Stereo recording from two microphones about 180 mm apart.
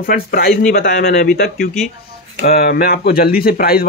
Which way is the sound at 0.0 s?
55° left (ahead or behind).